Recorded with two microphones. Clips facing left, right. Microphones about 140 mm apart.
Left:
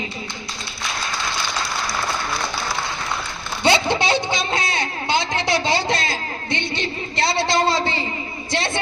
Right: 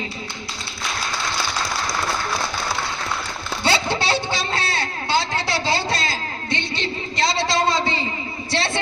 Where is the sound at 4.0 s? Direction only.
20° left (ahead or behind).